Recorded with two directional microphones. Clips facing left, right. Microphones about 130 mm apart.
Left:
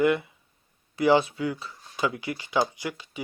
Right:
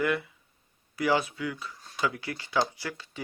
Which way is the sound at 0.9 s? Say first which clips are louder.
Left 6 dB; 25° left (ahead or behind).